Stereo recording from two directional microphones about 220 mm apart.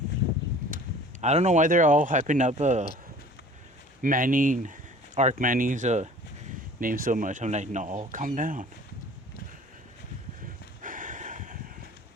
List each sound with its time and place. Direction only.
1.2 s speech: 30° right (ahead or behind)
4.0 s speech: 40° right (ahead or behind)
10.8 s a sound: 35° right (ahead or behind)